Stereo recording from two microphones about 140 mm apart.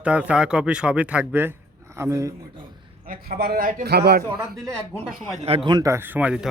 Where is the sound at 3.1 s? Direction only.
90° right.